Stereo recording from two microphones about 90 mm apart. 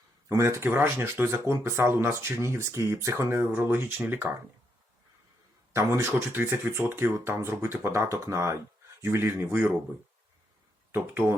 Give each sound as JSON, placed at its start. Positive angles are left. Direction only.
{"t": 0.3, "sound": "speech", "side_deg": -35}
{"t": 5.7, "sound": "speech", "side_deg": -30}
{"t": 10.9, "sound": "speech", "side_deg": -25}